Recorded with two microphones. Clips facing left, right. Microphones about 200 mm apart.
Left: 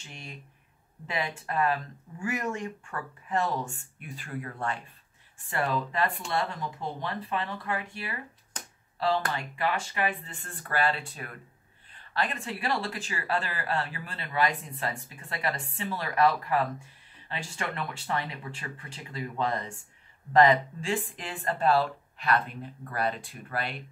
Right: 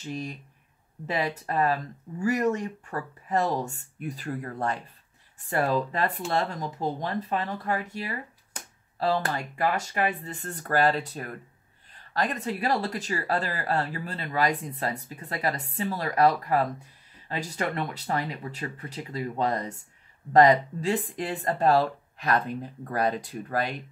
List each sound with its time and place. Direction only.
0.0 s speech: 40° right (ahead or behind)